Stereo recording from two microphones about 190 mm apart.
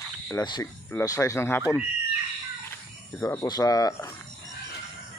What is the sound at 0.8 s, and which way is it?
Speech, 15° left (ahead or behind).